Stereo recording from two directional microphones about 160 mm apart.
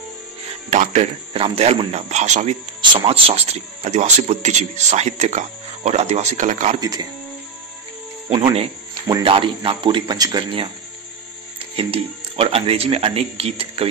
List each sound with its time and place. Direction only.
0.7 s speech: 45° right (ahead or behind)
2.8 s speech: 30° right (ahead or behind); by 6.8 s 45° right (ahead or behind)
6.8 s speech: 25° right (ahead or behind)
9.0 s speech: 30° right (ahead or behind)
11.7 s speech: 35° right (ahead or behind)